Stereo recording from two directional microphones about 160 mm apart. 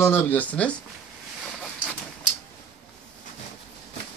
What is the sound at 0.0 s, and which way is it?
Speech, 15° left (ahead or behind).